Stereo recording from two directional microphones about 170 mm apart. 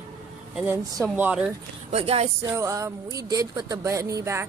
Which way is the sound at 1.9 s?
40° right (ahead or behind).